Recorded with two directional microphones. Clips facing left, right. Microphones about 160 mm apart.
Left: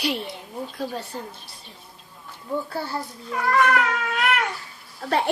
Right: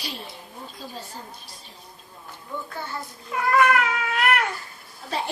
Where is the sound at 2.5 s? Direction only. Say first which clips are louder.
Left 7 dB; 30° left (ahead or behind).